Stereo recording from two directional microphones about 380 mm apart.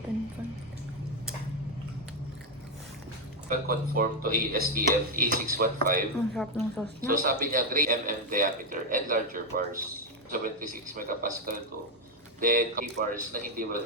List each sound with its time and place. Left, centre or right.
3.5 s a man's voice: right
6.3 s a woman's voice: centre
7.1 s a man's voice: right